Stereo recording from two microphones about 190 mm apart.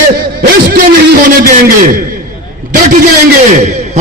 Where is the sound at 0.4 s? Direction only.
50° right (ahead or behind).